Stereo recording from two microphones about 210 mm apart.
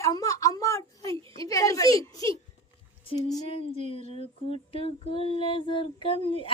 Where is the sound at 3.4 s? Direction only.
25° left (ahead or behind).